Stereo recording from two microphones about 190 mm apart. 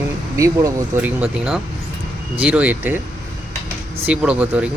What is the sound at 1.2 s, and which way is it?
Speech, 5° right (ahead or behind).